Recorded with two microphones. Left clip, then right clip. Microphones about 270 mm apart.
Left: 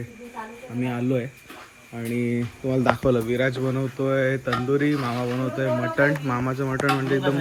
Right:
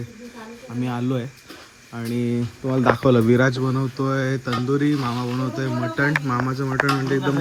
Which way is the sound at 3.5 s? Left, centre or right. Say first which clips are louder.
Right 2 dB; centre.